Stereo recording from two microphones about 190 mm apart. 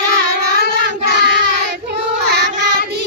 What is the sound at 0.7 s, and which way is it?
Child singing, 65° right (ahead or behind).